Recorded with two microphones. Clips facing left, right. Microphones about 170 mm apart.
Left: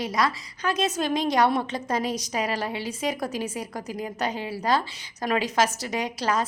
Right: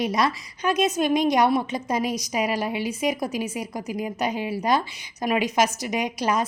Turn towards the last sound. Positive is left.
turn(degrees=-15)  # may be behind; listen again after turning